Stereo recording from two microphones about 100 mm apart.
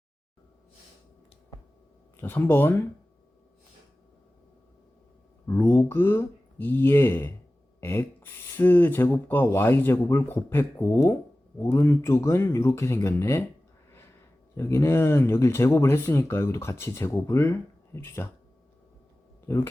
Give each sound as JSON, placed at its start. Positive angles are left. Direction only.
{"t": 2.2, "sound": "speech", "side_deg": 20}
{"t": 5.5, "sound": "speech", "side_deg": 25}
{"t": 14.5, "sound": "speech", "side_deg": 25}
{"t": 19.5, "sound": "speech", "side_deg": 25}